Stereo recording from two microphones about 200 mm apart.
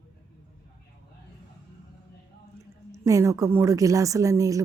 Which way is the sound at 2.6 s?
15° right (ahead or behind).